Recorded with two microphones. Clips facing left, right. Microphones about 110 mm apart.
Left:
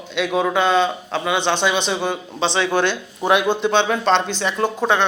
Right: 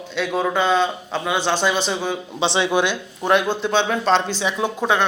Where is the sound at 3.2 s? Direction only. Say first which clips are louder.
Left 2 dB; 5° left (ahead or behind).